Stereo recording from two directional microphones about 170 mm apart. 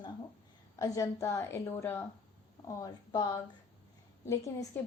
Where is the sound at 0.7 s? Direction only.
20° left (ahead or behind).